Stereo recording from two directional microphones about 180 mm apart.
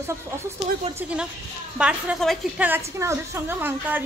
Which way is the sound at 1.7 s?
Centre (ahead or behind).